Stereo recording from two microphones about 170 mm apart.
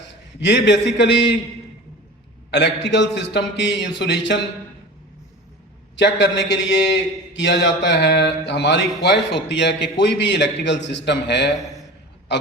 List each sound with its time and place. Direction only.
0.1 s a man's voice: 90° left
2.5 s a man's voice: 90° left
6.0 s a man's voice: 90° left